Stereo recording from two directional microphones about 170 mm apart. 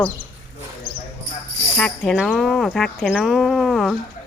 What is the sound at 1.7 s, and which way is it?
Speech, 5° left (ahead or behind).